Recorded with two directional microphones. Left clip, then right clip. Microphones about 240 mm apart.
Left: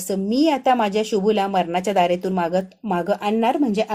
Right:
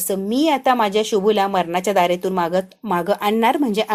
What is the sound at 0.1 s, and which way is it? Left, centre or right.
Speech, centre.